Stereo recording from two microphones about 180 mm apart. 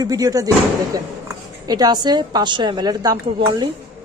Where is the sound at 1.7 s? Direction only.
25° right (ahead or behind).